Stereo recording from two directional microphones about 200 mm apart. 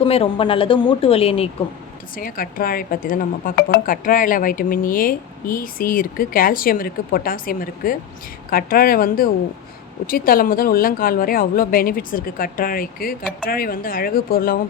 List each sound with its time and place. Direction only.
0.0 s speech: 30° left (ahead or behind)
2.1 s speech: 45° left (ahead or behind)